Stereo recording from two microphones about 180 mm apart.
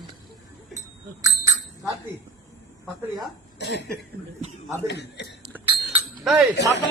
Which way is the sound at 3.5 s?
70° left (ahead or behind).